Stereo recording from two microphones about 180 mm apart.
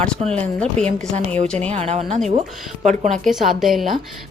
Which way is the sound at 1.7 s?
35° right (ahead or behind).